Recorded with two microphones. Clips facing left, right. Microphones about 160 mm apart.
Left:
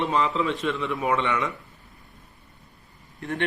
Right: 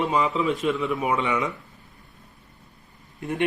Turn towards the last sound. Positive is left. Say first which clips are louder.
# right 1 dB
turn(degrees=-20)  # may be behind; listen again after turning